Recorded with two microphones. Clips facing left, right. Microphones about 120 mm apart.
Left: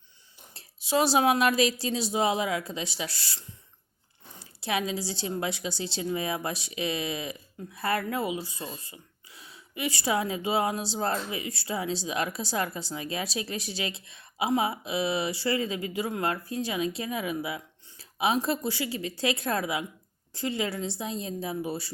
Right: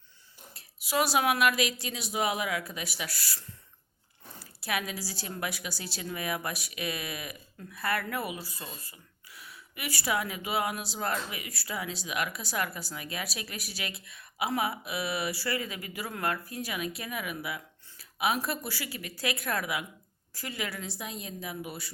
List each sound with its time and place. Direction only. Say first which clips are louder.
0.5 s a woman's voice: left 3 dB; 25° left (ahead or behind)